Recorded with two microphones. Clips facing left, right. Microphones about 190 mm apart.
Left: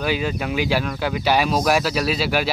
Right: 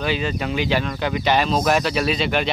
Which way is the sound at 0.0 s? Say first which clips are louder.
Even; 10° left (ahead or behind).